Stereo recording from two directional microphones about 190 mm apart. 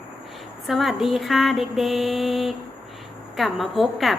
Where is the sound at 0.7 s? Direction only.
Centre (ahead or behind).